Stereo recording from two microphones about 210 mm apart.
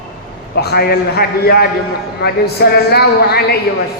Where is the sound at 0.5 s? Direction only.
50° left (ahead or behind).